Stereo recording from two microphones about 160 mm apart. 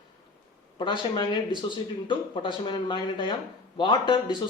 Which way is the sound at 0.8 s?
30° left (ahead or behind).